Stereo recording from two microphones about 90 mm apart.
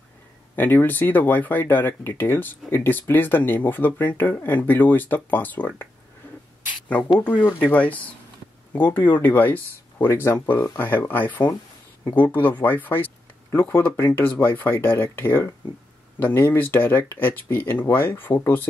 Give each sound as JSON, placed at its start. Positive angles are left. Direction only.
{"t": 0.6, "sound": "speech", "side_deg": 20}
{"t": 7.5, "sound": "speech", "side_deg": 15}